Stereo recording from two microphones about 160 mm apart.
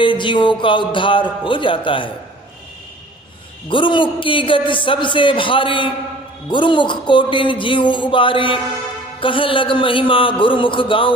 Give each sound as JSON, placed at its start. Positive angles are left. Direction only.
{"t": 0.0, "sound": "a man's voice", "side_deg": 30}
{"t": 3.7, "sound": "a man's voice", "side_deg": 30}